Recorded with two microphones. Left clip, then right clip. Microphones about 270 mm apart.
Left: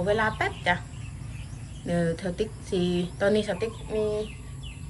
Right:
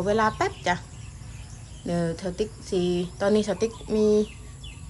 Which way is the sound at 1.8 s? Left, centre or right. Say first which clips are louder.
Even; centre.